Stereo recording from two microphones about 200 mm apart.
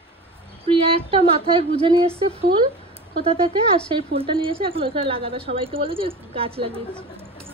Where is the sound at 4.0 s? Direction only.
30° right (ahead or behind).